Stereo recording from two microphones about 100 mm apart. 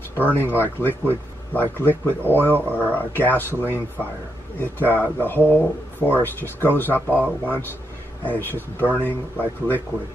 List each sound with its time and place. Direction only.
0.1 s speech: 20° left (ahead or behind)
8.3 s speech: 20° left (ahead or behind)